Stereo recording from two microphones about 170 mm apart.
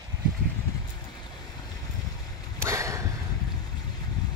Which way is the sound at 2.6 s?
15° right (ahead or behind).